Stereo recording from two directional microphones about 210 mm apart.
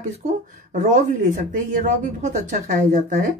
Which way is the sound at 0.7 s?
35° right (ahead or behind).